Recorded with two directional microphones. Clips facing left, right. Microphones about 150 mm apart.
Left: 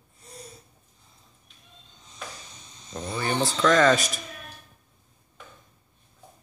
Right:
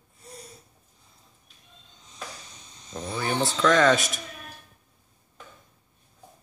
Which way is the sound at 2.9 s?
Centre (ahead or behind).